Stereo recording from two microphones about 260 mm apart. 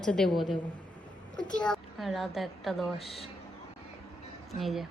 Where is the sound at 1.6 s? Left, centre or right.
Centre.